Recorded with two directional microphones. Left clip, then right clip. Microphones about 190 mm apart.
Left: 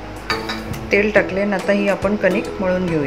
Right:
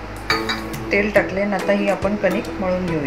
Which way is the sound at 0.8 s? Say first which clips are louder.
Left 2 dB; 20° left (ahead or behind).